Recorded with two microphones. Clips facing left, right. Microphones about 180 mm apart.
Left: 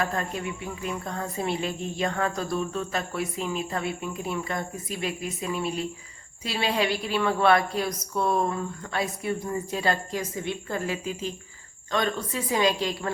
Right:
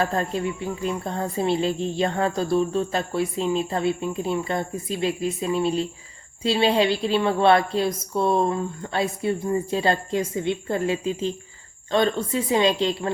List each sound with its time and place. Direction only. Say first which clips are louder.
0.0 s speech: right 5 dB; 30° right (ahead or behind)